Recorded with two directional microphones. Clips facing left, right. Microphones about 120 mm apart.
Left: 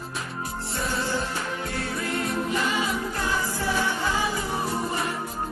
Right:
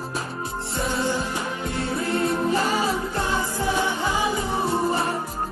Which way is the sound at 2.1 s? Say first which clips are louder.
Right 5 dB; 35° right (ahead or behind).